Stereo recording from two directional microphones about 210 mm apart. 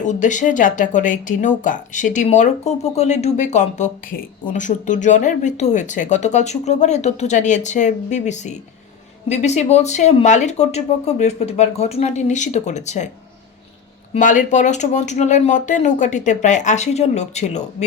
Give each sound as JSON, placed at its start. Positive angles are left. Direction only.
{"t": 0.0, "sound": "speech", "side_deg": 35}
{"t": 14.1, "sound": "speech", "side_deg": 35}